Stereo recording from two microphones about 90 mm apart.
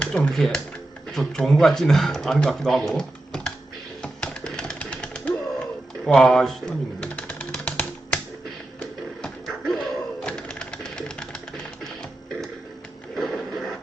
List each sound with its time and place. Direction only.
0.0 s speech: 10° left (ahead or behind)
4.0 s typewriter: 10° left (ahead or behind)
6.1 s speech: 5° left (ahead or behind)
7.1 s typewriter: 15° left (ahead or behind)
9.2 s a sound: 5° left (ahead or behind)
13.1 s printer: centre (ahead or behind)